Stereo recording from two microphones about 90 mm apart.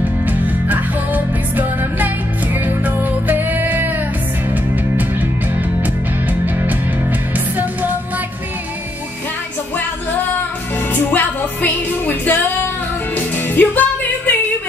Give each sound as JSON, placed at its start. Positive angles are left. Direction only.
{"t": 0.3, "sound": "music", "side_deg": -20}
{"t": 7.3, "sound": "music", "side_deg": -20}
{"t": 11.1, "sound": "music", "side_deg": 20}
{"t": 13.6, "sound": "music", "side_deg": 20}